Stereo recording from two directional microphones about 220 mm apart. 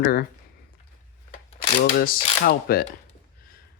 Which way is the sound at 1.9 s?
40° left (ahead or behind).